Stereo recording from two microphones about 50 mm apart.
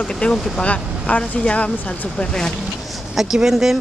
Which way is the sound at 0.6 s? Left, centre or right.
Left.